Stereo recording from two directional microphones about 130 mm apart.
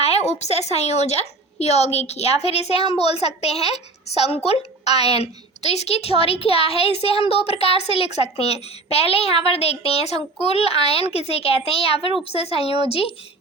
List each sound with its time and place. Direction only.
0.0 s a woman's voice: 55° left (ahead or behind)